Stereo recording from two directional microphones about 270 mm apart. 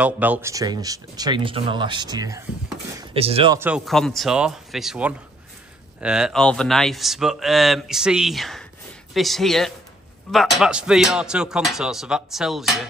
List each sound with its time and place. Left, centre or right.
0.0 s speech: centre; by 3.5 s right
3.5 s speech: centre